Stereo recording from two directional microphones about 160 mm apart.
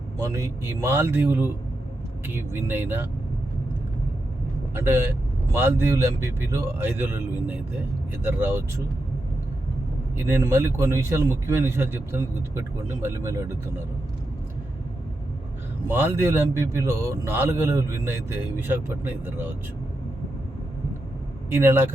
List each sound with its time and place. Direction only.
0.2 s a man's voice: 20° right (ahead or behind)
4.7 s a man's voice: 15° right (ahead or behind)
10.2 s a man's voice: 15° right (ahead or behind)
15.9 s a man's voice: 15° right (ahead or behind)
21.5 s a man's voice: 15° right (ahead or behind)